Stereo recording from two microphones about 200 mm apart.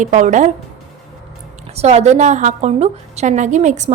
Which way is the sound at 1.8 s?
35° right (ahead or behind).